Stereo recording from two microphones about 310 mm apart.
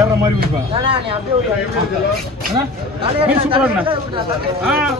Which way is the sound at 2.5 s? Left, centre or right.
Centre.